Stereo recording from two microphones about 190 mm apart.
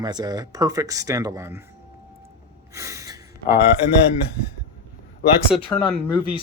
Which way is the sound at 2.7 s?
15° right (ahead or behind).